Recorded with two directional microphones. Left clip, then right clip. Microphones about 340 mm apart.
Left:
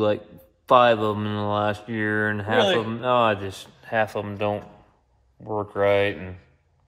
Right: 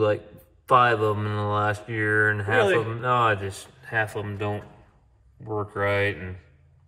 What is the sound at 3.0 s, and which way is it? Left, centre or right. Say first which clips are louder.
Speech: left 3 dB; left.